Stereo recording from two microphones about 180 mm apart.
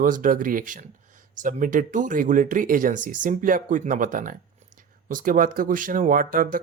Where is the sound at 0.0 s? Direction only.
50° right (ahead or behind).